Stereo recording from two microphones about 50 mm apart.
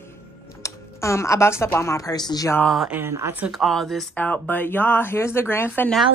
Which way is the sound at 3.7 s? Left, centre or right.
Centre.